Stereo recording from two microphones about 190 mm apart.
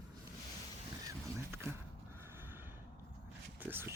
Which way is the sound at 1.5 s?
10° right (ahead or behind).